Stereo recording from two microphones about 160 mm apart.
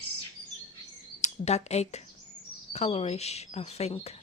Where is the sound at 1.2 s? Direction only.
45° left (ahead or behind).